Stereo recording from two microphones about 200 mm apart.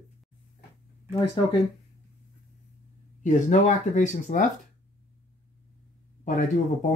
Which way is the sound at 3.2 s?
40° left (ahead or behind).